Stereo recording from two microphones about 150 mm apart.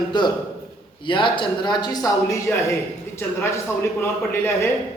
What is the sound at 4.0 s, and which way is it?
Speech, 15° left (ahead or behind).